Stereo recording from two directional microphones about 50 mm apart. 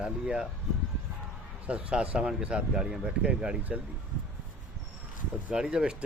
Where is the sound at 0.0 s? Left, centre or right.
Centre.